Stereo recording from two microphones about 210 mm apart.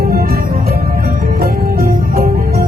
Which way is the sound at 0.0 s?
45° right (ahead or behind).